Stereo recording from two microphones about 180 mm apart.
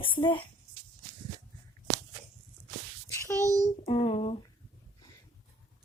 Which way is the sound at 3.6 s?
35° left (ahead or behind).